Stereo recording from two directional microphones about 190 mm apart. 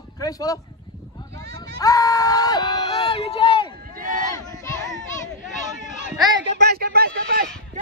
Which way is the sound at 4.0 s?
45° right (ahead or behind).